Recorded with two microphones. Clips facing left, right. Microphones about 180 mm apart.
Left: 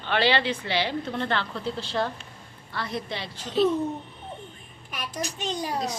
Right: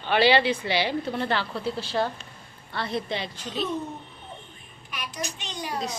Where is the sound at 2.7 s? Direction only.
25° right (ahead or behind).